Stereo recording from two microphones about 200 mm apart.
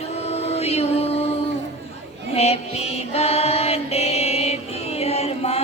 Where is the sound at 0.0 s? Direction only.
30° left (ahead or behind).